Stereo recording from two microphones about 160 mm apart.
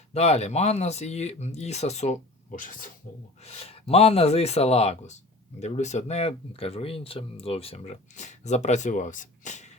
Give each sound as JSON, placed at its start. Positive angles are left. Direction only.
{"t": 0.1, "sound": "speech", "side_deg": 40}
{"t": 3.4, "sound": "speech", "side_deg": 40}